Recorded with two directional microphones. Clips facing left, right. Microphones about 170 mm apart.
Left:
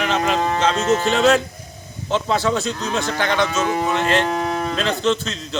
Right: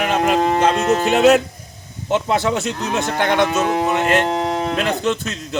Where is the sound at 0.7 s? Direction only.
60° right (ahead or behind).